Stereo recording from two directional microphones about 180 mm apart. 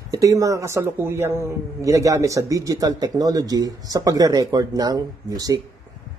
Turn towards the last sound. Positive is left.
turn(degrees=-20)  # may be behind; listen again after turning